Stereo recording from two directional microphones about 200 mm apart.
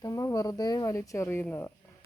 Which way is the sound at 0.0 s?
15° left (ahead or behind).